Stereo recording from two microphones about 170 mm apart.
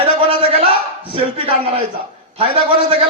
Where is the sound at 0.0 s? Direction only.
35° right (ahead or behind).